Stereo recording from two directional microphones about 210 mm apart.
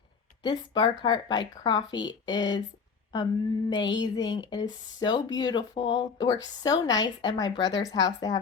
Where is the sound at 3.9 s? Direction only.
20° left (ahead or behind).